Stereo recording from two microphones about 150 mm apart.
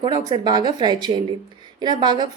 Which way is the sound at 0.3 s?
25° right (ahead or behind).